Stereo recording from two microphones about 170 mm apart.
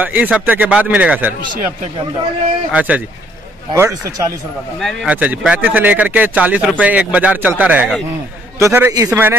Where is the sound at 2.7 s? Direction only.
10° right (ahead or behind).